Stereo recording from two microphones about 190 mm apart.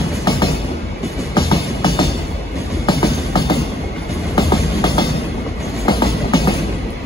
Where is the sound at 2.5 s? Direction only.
15° left (ahead or behind).